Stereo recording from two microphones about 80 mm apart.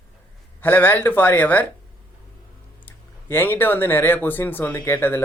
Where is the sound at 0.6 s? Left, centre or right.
Left.